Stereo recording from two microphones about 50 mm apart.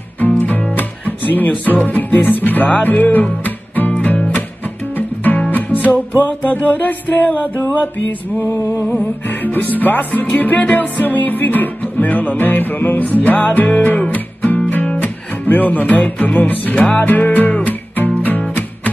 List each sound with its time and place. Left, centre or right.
0.2 s music: left
9.3 s music: left